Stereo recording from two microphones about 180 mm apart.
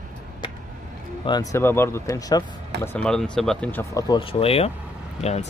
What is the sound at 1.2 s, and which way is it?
Speech, 20° left (ahead or behind).